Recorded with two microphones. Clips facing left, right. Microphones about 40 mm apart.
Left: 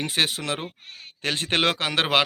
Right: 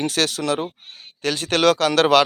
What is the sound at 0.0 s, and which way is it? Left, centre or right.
Speech, left.